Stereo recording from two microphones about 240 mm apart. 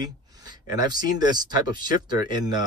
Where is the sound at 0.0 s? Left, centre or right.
Centre.